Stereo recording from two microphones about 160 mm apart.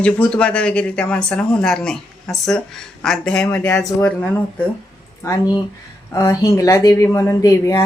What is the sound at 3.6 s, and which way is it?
Speech, 20° left (ahead or behind).